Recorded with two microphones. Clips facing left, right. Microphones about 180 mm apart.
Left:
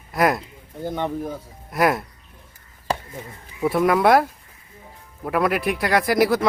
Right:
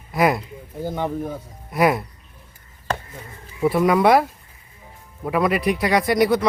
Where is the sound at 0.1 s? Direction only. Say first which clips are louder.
Right 1 dB; centre (ahead or behind).